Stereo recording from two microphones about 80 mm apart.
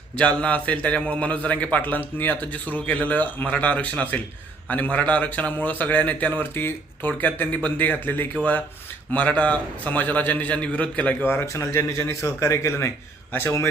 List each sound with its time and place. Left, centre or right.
0.2 s a man's voice: centre; by 13.7 s left